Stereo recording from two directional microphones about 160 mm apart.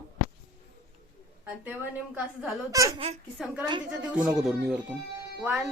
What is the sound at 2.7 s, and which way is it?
Speech, 20° right (ahead or behind).